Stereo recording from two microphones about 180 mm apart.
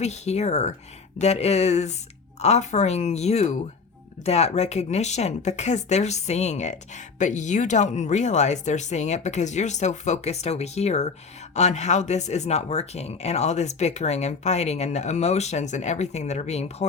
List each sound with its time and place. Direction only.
0.0 s speech: 40° left (ahead or behind)